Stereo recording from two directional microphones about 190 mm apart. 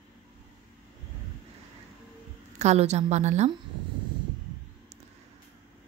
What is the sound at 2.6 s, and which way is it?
Speech, 35° right (ahead or behind).